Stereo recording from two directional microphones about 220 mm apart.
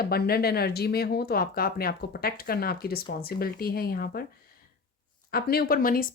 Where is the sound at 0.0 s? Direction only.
45° left (ahead or behind).